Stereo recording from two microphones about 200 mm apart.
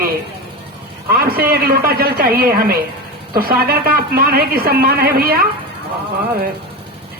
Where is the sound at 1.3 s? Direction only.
50° right (ahead or behind).